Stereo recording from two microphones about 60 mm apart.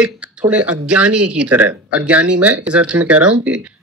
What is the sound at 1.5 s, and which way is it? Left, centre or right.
Speech, right.